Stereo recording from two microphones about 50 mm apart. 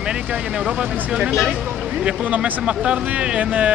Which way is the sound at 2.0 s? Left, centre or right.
Right.